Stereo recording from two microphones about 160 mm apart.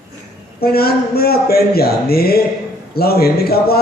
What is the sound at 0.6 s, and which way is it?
A man's voice, 75° left (ahead or behind).